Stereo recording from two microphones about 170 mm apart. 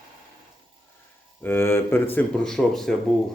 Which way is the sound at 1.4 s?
15° left (ahead or behind).